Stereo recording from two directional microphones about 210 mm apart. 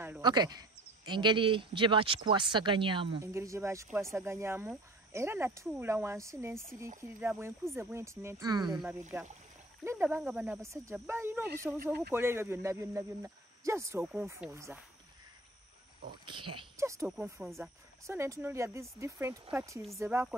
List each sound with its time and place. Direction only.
0.2 s speech: 20° right (ahead or behind)
9.8 s speech: 10° right (ahead or behind)
16.1 s speech: 25° right (ahead or behind)